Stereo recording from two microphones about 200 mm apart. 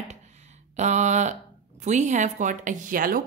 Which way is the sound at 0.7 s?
35° right (ahead or behind).